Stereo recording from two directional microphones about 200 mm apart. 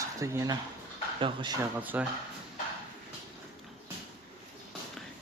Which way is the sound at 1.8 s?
10° right (ahead or behind).